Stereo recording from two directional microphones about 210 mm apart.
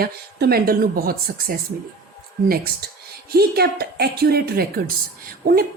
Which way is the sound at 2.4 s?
45° right (ahead or behind).